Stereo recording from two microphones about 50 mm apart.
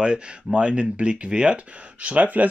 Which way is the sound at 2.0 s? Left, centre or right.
Right.